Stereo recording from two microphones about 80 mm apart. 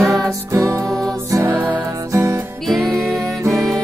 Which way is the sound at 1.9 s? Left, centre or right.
Right.